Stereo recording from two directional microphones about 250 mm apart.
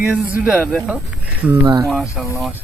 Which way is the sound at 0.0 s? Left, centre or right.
Centre.